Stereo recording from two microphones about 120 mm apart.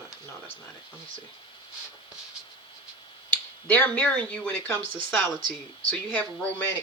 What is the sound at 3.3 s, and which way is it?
Speech, 10° left (ahead or behind).